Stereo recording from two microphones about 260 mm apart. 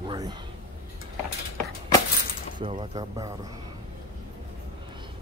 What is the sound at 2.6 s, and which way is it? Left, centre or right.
Speech, right.